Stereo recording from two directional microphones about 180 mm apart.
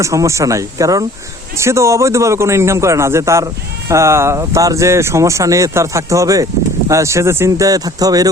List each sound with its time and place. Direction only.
0.0 s a man's voice: 15° right (ahead or behind)